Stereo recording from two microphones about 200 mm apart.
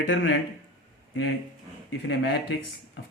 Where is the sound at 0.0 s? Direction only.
65° left (ahead or behind).